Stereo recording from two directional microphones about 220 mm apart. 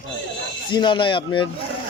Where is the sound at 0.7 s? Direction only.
20° left (ahead or behind).